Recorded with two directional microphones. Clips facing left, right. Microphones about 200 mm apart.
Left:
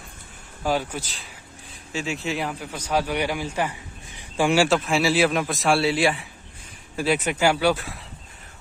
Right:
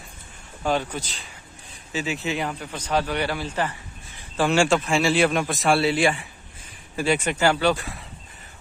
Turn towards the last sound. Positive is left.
turn(degrees=0)  # may be behind; listen again after turning